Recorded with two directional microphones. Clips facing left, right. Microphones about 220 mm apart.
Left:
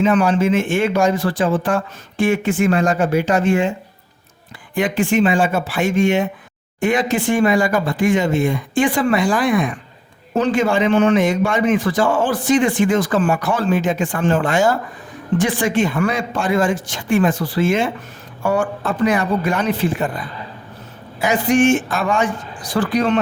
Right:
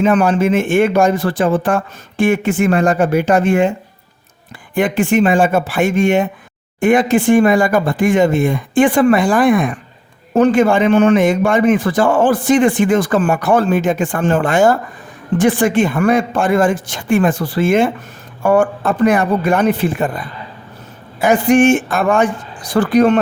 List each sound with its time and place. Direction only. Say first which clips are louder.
0.0 s speech: right 2 dB; 50° right (ahead or behind)
4.7 s a man's voice: right 3 dB; 55° right (ahead or behind)
21.2 s speech: right 4 dB; 55° right (ahead or behind)